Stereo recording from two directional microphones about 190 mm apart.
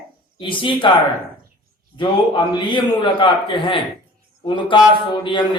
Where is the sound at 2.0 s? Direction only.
25° left (ahead or behind).